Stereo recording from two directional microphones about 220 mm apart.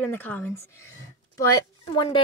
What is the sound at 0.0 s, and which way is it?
A woman's voice, 10° left (ahead or behind).